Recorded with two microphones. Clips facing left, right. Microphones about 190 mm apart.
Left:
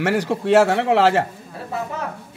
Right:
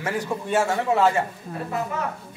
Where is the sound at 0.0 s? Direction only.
80° left.